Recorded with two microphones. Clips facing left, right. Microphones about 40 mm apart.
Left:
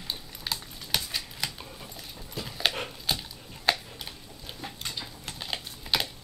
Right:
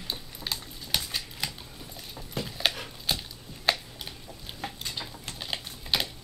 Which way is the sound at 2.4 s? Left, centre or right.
Centre.